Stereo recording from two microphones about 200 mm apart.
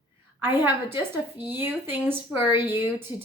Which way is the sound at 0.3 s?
10° right (ahead or behind).